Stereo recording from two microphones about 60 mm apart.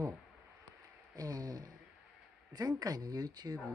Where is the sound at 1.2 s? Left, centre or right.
Right.